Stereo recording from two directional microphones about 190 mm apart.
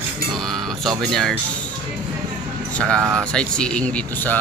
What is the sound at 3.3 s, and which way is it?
Speech, 5° left (ahead or behind).